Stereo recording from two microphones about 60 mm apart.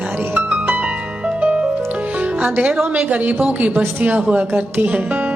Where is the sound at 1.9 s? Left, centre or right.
Right.